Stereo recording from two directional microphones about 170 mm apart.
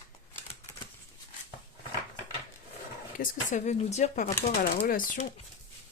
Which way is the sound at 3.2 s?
50° left (ahead or behind).